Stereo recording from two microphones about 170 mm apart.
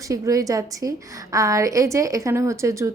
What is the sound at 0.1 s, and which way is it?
A woman's voice, 20° right (ahead or behind).